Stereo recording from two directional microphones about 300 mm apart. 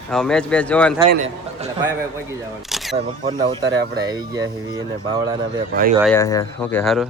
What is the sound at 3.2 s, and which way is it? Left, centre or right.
Speech, centre.